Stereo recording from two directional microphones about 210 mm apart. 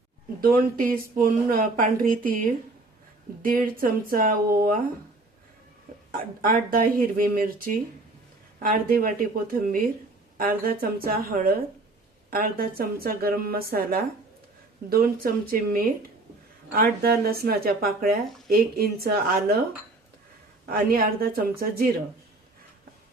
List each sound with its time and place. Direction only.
0.4 s a woman's voice: 40° right (ahead or behind)
6.1 s a woman's voice: 40° right (ahead or behind)
20.7 s a woman's voice: 45° right (ahead or behind)